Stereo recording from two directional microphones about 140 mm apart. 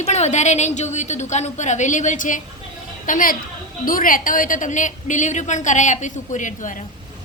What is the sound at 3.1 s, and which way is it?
A woman's voice, 80° left.